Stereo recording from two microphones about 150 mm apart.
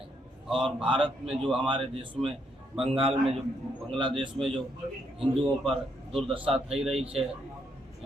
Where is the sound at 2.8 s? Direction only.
40° right (ahead or behind).